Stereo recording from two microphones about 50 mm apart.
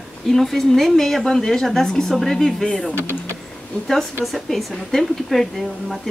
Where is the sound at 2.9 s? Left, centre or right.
Left.